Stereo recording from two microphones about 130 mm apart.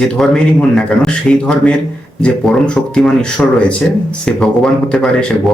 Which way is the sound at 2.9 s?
5° left (ahead or behind).